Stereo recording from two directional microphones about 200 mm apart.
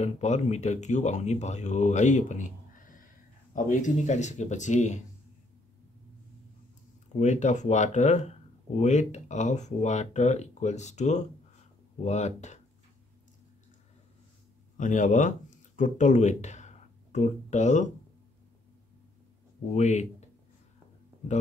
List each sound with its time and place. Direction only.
0.0 s speech: 35° left (ahead or behind)
7.1 s speech: 35° left (ahead or behind)
14.8 s speech: 40° left (ahead or behind)
19.7 s speech: 35° left (ahead or behind)